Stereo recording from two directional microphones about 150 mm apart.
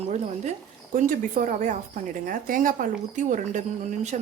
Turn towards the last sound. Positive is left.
turn(degrees=-55)  # may be behind; listen again after turning